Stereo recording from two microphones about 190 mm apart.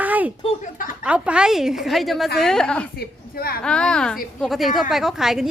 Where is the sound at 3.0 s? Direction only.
55° left (ahead or behind).